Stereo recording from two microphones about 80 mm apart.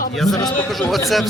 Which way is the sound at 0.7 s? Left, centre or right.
Centre.